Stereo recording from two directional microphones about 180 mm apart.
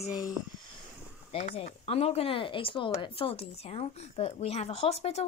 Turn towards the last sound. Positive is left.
turn(degrees=35)  # may be behind; listen again after turning